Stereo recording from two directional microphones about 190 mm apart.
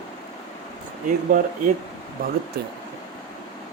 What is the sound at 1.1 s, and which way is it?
Speech, 45° right (ahead or behind).